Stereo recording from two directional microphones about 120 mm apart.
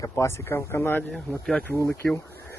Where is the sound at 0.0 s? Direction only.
25° left (ahead or behind).